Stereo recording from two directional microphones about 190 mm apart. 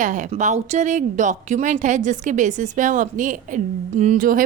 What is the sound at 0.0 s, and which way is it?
A woman's voice, 40° right (ahead or behind).